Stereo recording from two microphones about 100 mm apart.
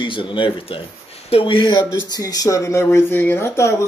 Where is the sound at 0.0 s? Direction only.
55° left (ahead or behind).